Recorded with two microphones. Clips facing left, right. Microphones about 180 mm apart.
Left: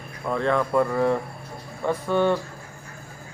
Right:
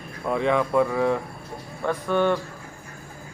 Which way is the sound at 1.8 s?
10° left (ahead or behind).